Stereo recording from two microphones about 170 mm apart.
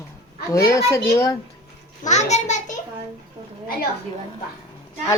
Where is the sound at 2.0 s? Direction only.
45° left (ahead or behind).